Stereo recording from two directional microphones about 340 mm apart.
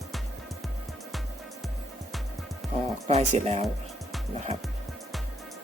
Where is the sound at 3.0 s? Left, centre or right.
Centre.